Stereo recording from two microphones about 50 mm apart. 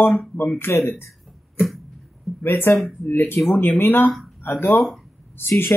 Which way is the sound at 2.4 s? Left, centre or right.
Left.